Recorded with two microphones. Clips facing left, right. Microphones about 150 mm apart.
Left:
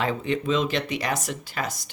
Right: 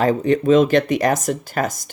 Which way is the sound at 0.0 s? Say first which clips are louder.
Right 9 dB; 45° right (ahead or behind).